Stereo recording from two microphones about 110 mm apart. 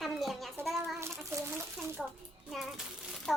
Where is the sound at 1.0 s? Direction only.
25° right (ahead or behind).